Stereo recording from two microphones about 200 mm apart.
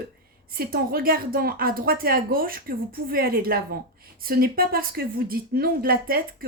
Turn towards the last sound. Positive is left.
turn(degrees=-45)  # may be behind; listen again after turning